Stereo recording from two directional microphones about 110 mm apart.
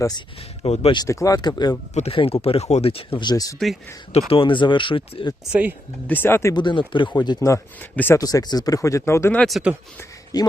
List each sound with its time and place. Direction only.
0.6 s speech: 60° left (ahead or behind)
1.0 s speech: 30° left (ahead or behind)
1.9 s speech: 90° left
2.1 s speech: 60° left (ahead or behind); by 3.5 s 40° left (ahead or behind)
4.3 s speech: 50° left (ahead or behind)
5.5 s speech: 15° right (ahead or behind)
6.1 s speech: 20° left (ahead or behind)
6.5 s speech: 45° left (ahead or behind)
7.8 s speech: 15° left (ahead or behind)
8.2 s speech: 35° left (ahead or behind)
9.5 s speech: 5° right (ahead or behind)
10.3 s speech: 35° left (ahead or behind)